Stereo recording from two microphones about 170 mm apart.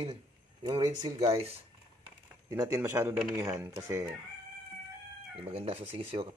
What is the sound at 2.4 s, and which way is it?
Speech, 15° right (ahead or behind).